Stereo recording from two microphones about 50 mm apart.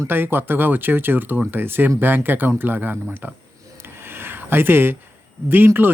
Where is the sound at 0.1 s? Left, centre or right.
Right.